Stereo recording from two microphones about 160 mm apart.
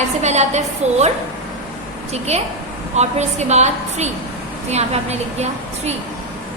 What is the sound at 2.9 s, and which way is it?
A woman's voice, 45° right (ahead or behind).